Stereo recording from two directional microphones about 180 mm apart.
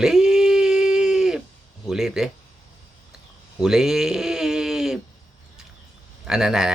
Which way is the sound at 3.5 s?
5° right (ahead or behind).